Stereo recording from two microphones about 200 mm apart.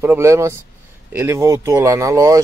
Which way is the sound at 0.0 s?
10° right (ahead or behind).